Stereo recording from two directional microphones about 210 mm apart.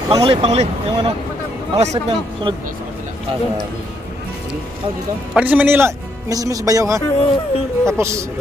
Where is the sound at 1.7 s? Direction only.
30° right (ahead or behind).